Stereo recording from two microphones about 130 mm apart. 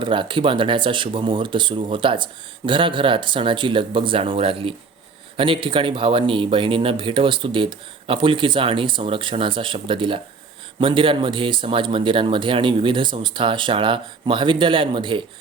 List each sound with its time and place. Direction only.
0.0 s speech: 40° right (ahead or behind)